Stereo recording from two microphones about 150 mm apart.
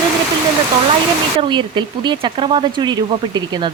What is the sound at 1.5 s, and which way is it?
Speech, 30° right (ahead or behind).